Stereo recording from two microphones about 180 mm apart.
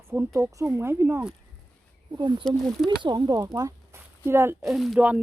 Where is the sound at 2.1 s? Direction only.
25° right (ahead or behind).